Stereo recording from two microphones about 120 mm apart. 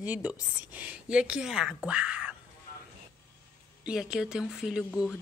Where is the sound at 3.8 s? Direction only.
5° right (ahead or behind).